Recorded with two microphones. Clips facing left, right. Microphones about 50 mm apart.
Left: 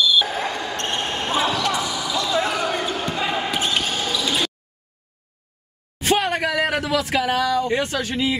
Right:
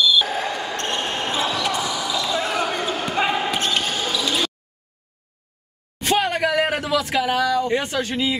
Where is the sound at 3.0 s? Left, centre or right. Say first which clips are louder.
Right 2 dB; right.